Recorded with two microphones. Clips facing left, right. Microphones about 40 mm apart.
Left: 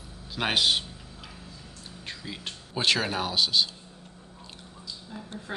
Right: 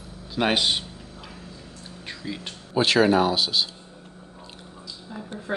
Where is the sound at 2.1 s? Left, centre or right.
Centre.